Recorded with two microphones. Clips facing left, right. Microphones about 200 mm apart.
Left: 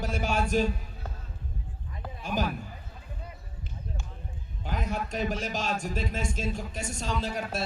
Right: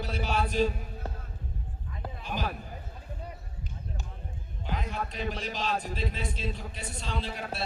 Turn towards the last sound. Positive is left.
turn(degrees=45)  # may be behind; listen again after turning